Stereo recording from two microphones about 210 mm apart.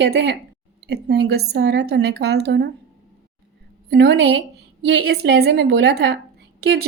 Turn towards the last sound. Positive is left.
turn(degrees=-50)  # may be behind; listen again after turning